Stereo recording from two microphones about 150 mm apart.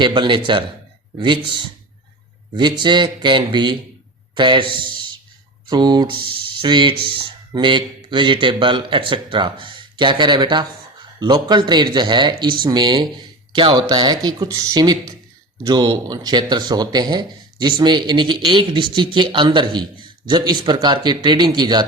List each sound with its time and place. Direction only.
0.0 s a man's voice: 30° right (ahead or behind)